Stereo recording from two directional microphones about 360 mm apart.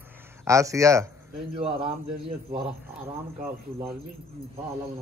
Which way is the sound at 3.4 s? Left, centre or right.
Centre.